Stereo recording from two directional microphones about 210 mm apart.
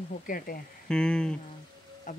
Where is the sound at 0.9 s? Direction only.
5° left (ahead or behind).